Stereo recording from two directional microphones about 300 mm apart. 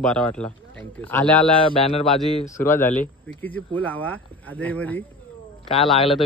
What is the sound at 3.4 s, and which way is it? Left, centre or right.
Speech, centre.